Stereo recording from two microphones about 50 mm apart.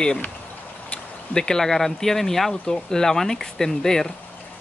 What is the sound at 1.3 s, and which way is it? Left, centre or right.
Speech, centre.